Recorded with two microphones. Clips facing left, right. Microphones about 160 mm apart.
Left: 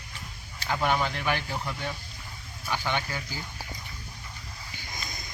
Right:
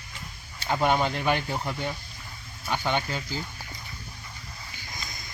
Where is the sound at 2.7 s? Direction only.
20° right (ahead or behind).